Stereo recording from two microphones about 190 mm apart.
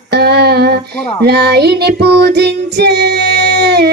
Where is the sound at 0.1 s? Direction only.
60° right (ahead or behind).